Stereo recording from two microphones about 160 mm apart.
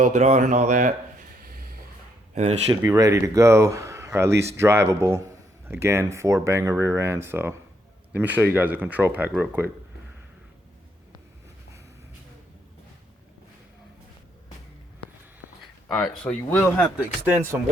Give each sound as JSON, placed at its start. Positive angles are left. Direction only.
{"t": 0.0, "sound": "speech", "side_deg": -45}
{"t": 1.4, "sound": "vehicle", "side_deg": -70}
{"t": 2.3, "sound": "speech", "side_deg": -40}
{"t": 2.8, "sound": "a man's voice", "side_deg": -20}
{"t": 15.9, "sound": "speech", "side_deg": 5}
{"t": 17.0, "sound": "a man's voice", "side_deg": -15}